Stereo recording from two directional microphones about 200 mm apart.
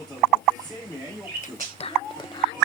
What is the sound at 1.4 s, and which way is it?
Speech, 30° left (ahead or behind).